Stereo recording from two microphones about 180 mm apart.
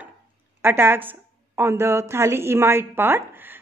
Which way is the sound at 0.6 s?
10° right (ahead or behind).